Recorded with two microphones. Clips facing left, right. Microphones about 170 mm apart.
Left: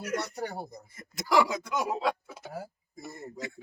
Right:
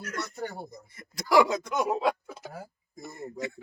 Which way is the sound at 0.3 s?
35° left (ahead or behind).